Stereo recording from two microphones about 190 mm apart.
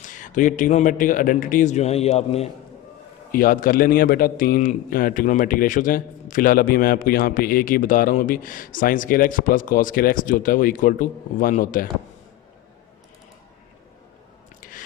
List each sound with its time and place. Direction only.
0.0 s a man's voice: 40° left (ahead or behind)
3.3 s a man's voice: 50° left (ahead or behind)
14.6 s a sound: 45° left (ahead or behind)